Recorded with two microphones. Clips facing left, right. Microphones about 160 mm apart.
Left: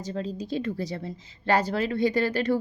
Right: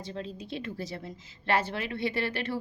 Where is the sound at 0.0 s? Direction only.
40° left (ahead or behind).